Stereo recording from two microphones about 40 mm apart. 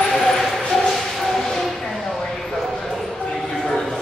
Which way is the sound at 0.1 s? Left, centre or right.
Centre.